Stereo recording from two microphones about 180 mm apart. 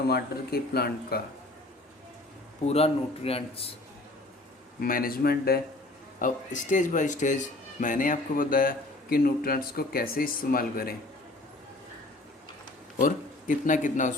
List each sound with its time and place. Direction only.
0.1 s speech: 60° left (ahead or behind)
2.6 s speech: 35° left (ahead or behind)
4.8 s speech: 55° left (ahead or behind)
6.1 s speech: 45° left (ahead or behind)
13.0 s speech: 45° left (ahead or behind)